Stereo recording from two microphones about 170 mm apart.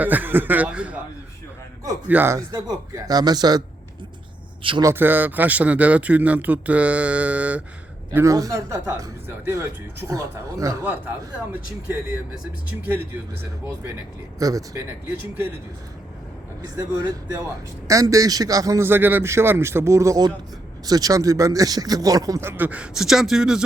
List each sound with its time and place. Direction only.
0.0 s speech: 10° right (ahead or behind)
4.6 s speech: 30° right (ahead or behind)
4.9 s speech: 10° right (ahead or behind)
14.3 s speech: 20° right (ahead or behind)
17.8 s speech: 20° right (ahead or behind); by 23.6 s 5° right (ahead or behind)